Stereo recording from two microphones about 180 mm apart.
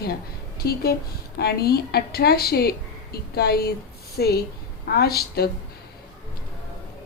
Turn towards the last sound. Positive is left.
turn(degrees=60)  # may be behind; listen again after turning